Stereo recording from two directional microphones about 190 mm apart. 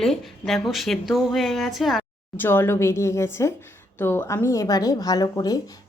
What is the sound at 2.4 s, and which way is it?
A woman's voice, 10° left (ahead or behind).